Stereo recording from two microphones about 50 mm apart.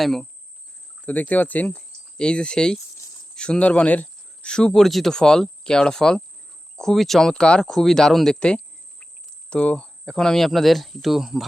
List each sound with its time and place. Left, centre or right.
0.0 s speech: centre
1.0 s speech: left
4.4 s speech: centre
7.4 s speech: centre
7.7 s speech: centre
8.4 s cricket: centre
9.5 s speech: left; by 11.4 s centre